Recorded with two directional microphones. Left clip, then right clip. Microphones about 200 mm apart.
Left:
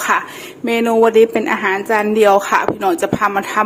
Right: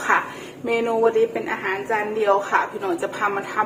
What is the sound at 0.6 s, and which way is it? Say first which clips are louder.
A woman's voice: left 6 dB; 50° left (ahead or behind).